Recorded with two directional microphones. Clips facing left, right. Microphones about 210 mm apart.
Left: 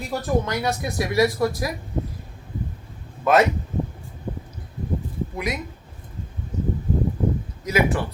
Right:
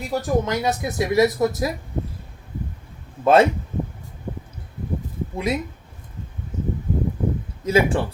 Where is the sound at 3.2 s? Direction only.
30° right (ahead or behind).